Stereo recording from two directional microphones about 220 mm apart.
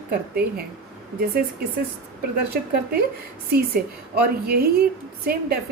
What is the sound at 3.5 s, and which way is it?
A woman's voice, 45° right (ahead or behind).